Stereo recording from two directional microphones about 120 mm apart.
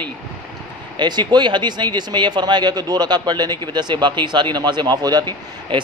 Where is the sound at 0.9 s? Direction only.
40° right (ahead or behind).